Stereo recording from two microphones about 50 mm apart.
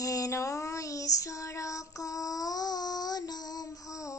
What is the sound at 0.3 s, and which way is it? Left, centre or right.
Child singing, left.